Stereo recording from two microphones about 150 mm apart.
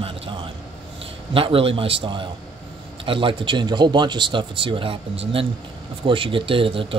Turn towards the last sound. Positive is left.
turn(degrees=-35)  # may be behind; listen again after turning